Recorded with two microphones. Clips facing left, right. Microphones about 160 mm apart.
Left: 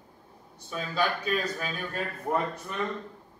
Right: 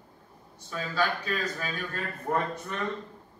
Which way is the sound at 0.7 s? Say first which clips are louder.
Even; 15° left (ahead or behind).